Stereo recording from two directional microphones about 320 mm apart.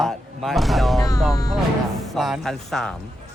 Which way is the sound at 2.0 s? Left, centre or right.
Centre.